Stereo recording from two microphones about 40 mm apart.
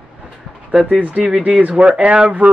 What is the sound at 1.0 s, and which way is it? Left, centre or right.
Speech, right.